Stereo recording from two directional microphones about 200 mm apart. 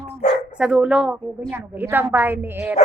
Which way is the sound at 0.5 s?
5° right (ahead or behind).